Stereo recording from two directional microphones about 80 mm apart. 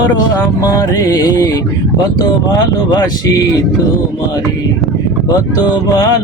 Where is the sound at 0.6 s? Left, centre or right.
Left.